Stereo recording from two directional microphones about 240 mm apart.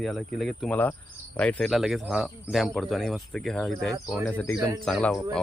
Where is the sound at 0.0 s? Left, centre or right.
Centre.